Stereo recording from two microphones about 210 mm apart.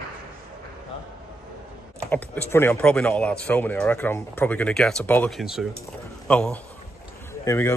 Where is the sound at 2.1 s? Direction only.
10° left (ahead or behind).